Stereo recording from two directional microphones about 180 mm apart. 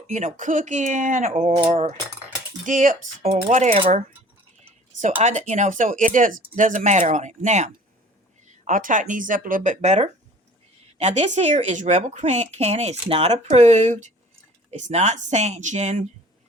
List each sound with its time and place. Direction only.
0.1 s speech: 45° right (ahead or behind)
1.5 s cutlery: 30° right (ahead or behind)
2.6 s speech: 45° right (ahead or behind)